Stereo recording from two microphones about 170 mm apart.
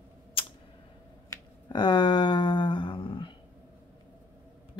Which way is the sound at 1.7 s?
25° left (ahead or behind).